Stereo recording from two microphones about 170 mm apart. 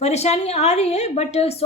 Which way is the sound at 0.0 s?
40° left (ahead or behind).